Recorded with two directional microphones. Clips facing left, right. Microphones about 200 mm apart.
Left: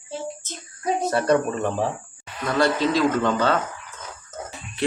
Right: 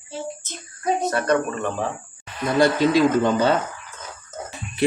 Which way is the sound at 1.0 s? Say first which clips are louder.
Left 3 dB; 30° left (ahead or behind).